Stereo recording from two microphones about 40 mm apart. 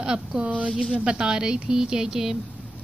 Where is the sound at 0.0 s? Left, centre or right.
Right.